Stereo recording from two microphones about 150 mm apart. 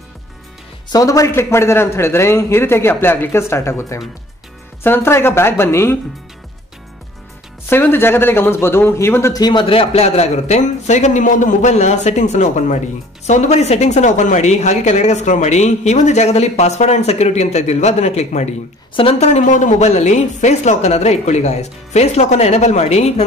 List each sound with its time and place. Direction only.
0.9 s a man's voice: 20° left (ahead or behind)
7.7 s speech: 15° left (ahead or behind); by 23.2 s 45° left (ahead or behind)